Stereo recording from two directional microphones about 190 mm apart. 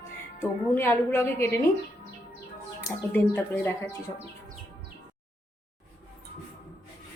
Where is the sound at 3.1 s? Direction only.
10° left (ahead or behind).